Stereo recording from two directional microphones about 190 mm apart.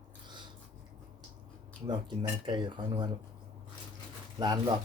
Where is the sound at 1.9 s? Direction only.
25° right (ahead or behind).